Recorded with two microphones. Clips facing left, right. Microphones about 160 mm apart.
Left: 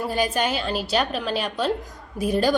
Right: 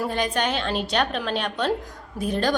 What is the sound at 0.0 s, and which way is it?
A woman's voice, 5° left (ahead or behind).